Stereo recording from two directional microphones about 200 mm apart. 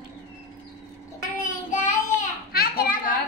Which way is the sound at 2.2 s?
50° left (ahead or behind).